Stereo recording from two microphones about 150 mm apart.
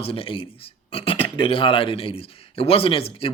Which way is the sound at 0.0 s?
40° left (ahead or behind).